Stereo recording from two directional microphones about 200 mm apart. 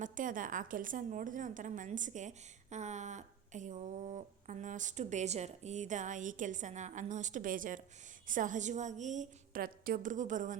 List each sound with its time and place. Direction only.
0.0 s a woman's voice: 40° right (ahead or behind)